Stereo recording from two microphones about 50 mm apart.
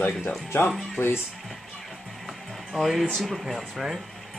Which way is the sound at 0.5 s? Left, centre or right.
Left.